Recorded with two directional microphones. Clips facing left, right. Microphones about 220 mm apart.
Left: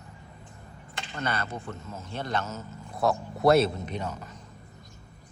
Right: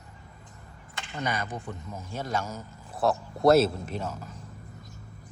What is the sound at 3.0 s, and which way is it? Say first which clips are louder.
A man's voice: even; centre (ahead or behind).